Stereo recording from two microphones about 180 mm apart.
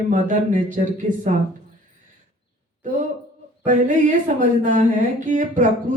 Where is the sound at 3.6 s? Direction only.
45° right (ahead or behind).